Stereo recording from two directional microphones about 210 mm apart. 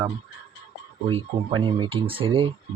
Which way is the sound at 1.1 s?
25° right (ahead or behind).